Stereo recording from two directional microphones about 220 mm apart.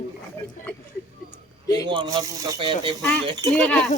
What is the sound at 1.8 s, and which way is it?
Speech, 20° right (ahead or behind).